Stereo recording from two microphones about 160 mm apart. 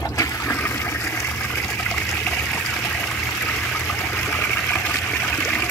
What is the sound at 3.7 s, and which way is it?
Stream, 10° left (ahead or behind).